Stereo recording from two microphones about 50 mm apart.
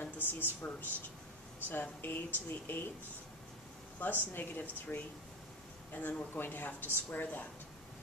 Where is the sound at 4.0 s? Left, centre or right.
Left.